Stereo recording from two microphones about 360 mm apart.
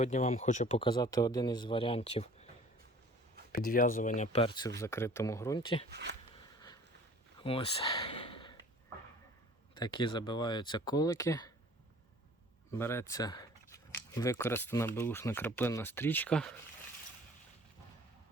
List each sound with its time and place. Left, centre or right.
0.0 s speech: centre
3.5 s speech: left
5.9 s speech: right
6.3 s a sound: centre
9.7 s speech: centre
12.7 s speech: centre